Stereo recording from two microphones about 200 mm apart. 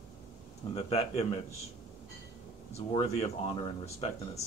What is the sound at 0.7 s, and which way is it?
Speech, 30° left (ahead or behind).